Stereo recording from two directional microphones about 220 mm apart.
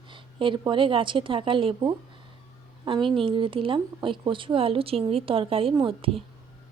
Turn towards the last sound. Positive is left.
turn(degrees=-25)  # may be behind; listen again after turning